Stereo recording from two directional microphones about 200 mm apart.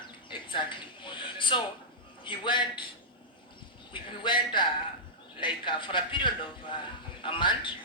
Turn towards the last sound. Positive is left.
turn(degrees=25)  # may be behind; listen again after turning